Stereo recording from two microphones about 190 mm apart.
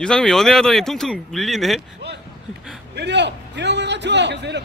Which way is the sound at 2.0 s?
65° right (ahead or behind).